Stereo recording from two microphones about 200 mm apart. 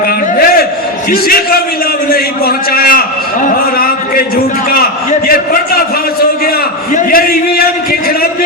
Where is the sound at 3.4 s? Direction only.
45° left (ahead or behind).